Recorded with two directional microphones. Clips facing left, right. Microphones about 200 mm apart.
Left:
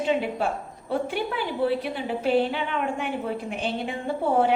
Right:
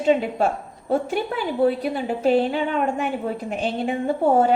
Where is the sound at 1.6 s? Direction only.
40° right (ahead or behind).